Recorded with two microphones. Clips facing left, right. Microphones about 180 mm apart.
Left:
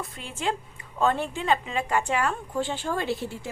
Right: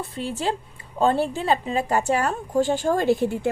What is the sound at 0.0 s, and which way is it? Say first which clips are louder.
A woman's voice: right 4 dB; 35° right (ahead or behind).